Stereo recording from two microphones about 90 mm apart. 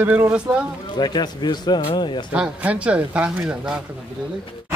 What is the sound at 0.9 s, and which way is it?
Speech, 50° left (ahead or behind).